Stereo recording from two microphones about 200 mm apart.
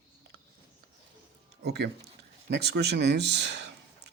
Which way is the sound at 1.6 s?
55° right (ahead or behind).